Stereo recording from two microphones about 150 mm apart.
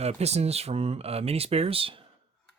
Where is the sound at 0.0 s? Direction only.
45° right (ahead or behind).